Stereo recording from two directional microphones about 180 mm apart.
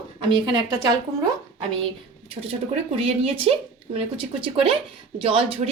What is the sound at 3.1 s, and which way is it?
A woman's voice, 30° right (ahead or behind).